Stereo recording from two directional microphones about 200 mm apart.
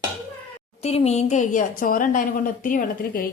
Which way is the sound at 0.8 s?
30° left (ahead or behind).